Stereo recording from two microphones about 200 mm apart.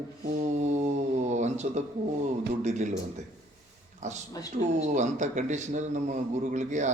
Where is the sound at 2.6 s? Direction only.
35° right (ahead or behind).